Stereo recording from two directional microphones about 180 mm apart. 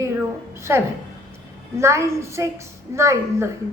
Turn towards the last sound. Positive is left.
turn(degrees=-15)  # may be behind; listen again after turning